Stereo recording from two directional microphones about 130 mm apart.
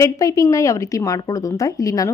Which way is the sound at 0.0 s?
25° left (ahead or behind).